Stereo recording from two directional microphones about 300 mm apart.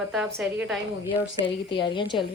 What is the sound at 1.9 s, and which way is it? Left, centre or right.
Speech, centre.